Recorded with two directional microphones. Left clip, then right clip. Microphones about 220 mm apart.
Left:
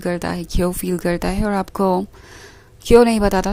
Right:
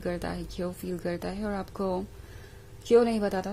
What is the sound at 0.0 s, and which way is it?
Speech, 30° left (ahead or behind).